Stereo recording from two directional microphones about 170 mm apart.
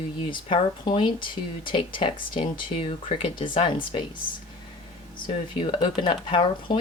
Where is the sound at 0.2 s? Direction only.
30° left (ahead or behind).